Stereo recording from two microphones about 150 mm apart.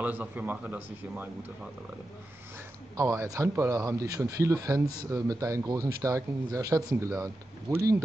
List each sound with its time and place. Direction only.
0.0 s a man's voice: 10° right (ahead or behind)
3.0 s speech: 20° right (ahead or behind)